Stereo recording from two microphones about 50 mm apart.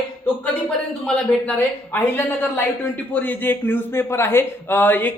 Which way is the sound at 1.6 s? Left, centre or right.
Left.